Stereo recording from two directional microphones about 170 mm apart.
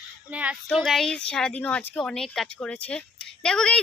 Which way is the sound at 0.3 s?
10° right (ahead or behind).